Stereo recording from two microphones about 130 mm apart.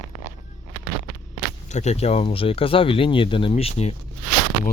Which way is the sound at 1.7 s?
60° left (ahead or behind).